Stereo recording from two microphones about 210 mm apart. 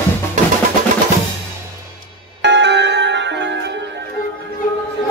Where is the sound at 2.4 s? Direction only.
55° right (ahead or behind).